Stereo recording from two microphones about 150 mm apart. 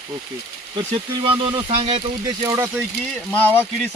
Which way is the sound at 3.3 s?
10° left (ahead or behind).